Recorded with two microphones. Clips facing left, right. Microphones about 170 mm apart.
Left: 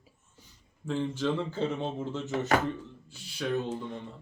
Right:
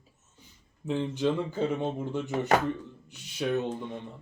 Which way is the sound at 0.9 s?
20° right (ahead or behind).